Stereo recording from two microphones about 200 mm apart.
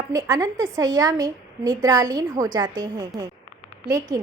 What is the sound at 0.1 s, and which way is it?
A woman's voice, 20° right (ahead or behind).